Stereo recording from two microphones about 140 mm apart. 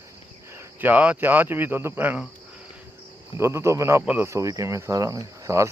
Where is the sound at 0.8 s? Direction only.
10° right (ahead or behind).